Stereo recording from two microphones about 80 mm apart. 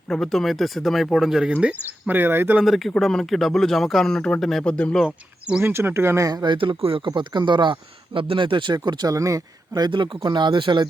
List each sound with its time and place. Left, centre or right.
0.1 s a man's voice: centre
2.0 s speech: right
2.6 s a man's voice: centre
5.0 s speech: centre
5.6 s speech: right
6.2 s speech: right
9.0 s speech: right
9.9 s speech: right